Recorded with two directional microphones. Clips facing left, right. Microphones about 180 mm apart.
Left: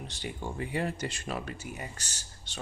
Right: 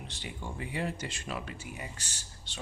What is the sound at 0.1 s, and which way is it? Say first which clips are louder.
Speech: left 4 dB; 45° left (ahead or behind).